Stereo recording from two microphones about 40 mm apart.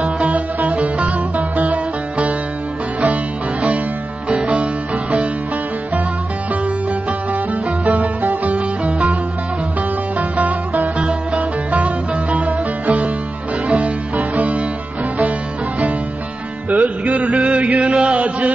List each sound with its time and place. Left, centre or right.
0.0 s music: right
4.3 s music: right
7.8 s music: right
10.1 s music: right
16.6 s music: right